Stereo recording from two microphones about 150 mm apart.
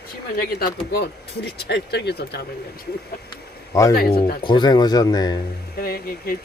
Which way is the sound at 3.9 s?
85° left.